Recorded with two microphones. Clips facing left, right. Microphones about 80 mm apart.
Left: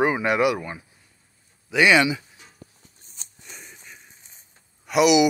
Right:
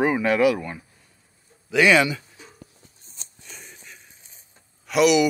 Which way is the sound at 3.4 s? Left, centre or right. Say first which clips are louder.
Even; centre.